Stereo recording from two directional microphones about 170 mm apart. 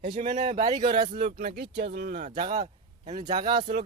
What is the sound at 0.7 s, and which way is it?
Speech, 25° right (ahead or behind).